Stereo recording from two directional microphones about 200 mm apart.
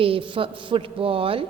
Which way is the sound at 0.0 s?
25° right (ahead or behind).